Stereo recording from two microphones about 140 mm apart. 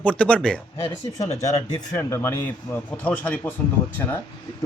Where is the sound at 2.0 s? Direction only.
20° left (ahead or behind).